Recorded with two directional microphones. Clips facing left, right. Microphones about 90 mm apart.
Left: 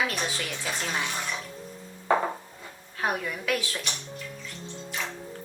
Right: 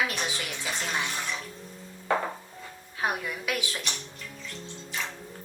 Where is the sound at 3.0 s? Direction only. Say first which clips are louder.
Left 1 dB; 10° right (ahead or behind).